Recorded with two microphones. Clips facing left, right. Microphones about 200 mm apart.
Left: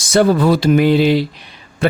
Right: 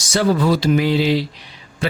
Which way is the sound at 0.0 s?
55° left (ahead or behind).